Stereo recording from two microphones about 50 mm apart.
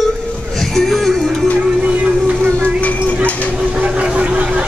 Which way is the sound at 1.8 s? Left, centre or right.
Right.